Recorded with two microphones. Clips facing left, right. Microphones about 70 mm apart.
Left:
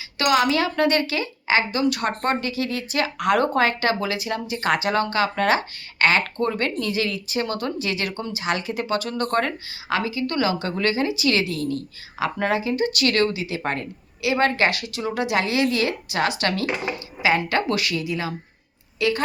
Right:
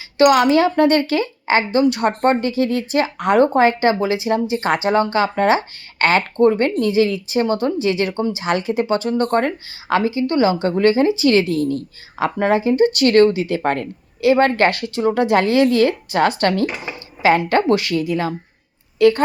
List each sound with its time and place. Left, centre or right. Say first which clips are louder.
0.2 s speech: right 7 dB; right